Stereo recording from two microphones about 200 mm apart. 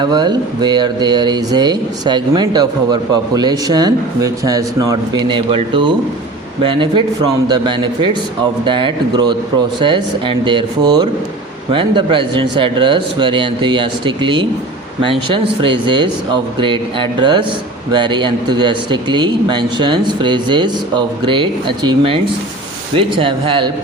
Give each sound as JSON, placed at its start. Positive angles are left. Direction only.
{"t": 0.0, "sound": "speech", "side_deg": -20}